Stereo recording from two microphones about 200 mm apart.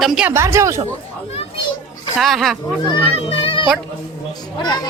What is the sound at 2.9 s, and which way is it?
A child's voice, 30° left (ahead or behind).